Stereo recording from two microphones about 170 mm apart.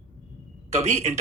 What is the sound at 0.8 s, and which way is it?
Speech, 40° right (ahead or behind).